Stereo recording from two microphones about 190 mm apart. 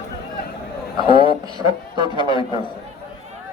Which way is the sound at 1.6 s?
25° left (ahead or behind).